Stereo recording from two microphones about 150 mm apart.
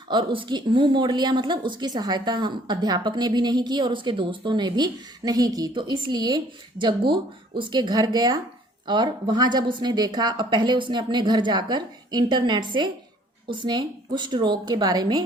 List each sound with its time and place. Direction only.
0.1 s a woman's voice: 30° right (ahead or behind)